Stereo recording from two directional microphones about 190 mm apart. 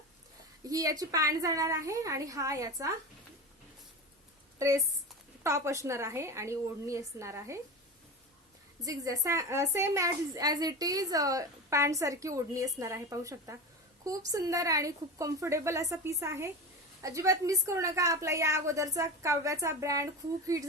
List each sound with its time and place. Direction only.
0.7 s a woman's voice: 20° right (ahead or behind)
4.5 s a woman's voice: 15° right (ahead or behind)
8.8 s a woman's voice: 15° right (ahead or behind)